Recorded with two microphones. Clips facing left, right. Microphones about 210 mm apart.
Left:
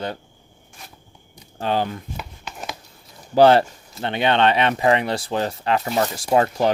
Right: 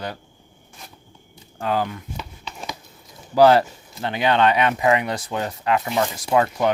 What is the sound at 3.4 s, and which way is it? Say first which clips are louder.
Speech: left 1 dB; 25° left (ahead or behind).